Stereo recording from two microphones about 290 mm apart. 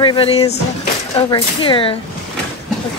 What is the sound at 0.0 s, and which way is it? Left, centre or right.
Speech, centre.